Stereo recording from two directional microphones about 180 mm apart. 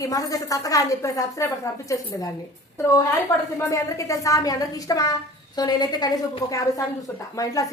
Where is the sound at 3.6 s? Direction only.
15° left (ahead or behind).